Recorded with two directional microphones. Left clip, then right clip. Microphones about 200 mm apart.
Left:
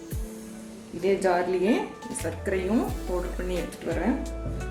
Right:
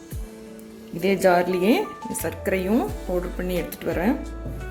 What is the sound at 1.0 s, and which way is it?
Speech, 50° right (ahead or behind).